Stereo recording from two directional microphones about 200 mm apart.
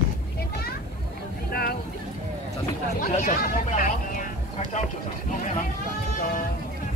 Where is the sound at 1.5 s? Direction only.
50° left (ahead or behind).